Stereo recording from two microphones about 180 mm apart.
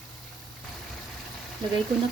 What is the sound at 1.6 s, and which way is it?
Speech, 25° right (ahead or behind).